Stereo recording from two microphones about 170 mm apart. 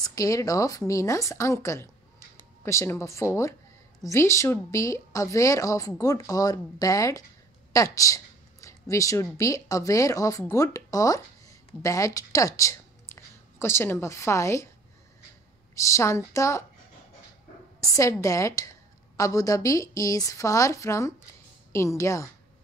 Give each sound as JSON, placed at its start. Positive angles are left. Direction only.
{"t": 0.0, "sound": "a woman's voice", "side_deg": 20}
{"t": 15.7, "sound": "a woman's voice", "side_deg": 20}
{"t": 17.7, "sound": "a woman's voice", "side_deg": 20}